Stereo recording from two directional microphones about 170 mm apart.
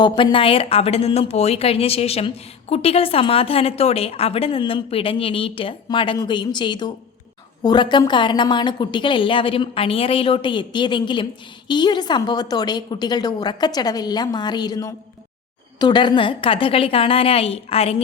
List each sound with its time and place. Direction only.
0.0 s a woman's voice: 30° left (ahead or behind)